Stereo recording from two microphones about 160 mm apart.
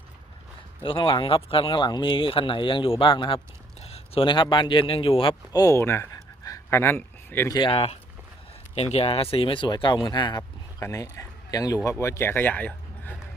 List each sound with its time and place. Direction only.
0.8 s speech: 30° left (ahead or behind)
5.3 s speech: 20° left (ahead or behind)
7.5 s speech: 35° left (ahead or behind); by 13.1 s 10° left (ahead or behind)